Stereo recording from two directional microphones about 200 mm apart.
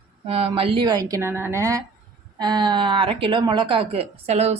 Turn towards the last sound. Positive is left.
turn(degrees=-30)  # may be behind; listen again after turning